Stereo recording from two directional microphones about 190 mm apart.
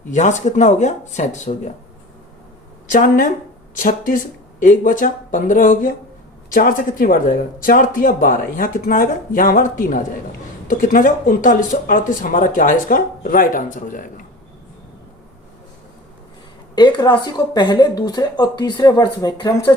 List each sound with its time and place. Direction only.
0.1 s speech: 40° left (ahead or behind)
2.9 s speech: 45° left (ahead or behind)
16.7 s speech: 25° left (ahead or behind)